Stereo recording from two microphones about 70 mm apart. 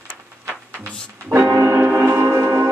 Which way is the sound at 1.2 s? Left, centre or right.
Right.